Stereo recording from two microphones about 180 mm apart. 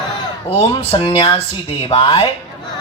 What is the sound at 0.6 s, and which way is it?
A man's voice, 35° left (ahead or behind).